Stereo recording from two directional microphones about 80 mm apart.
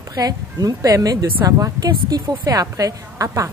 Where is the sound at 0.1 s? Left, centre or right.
Right.